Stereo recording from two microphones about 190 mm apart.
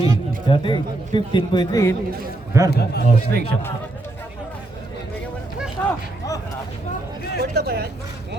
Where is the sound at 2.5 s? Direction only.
15° right (ahead or behind).